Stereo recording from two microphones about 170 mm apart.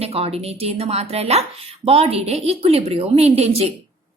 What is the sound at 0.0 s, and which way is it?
A woman's voice, 35° right (ahead or behind).